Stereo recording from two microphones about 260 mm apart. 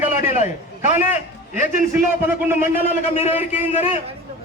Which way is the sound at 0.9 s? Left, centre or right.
Left.